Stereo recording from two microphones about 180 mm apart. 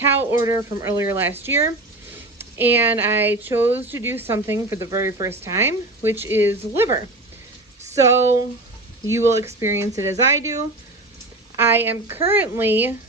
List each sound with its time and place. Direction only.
0.0 s speech: 15° right (ahead or behind)
11.5 s speech: 15° right (ahead or behind)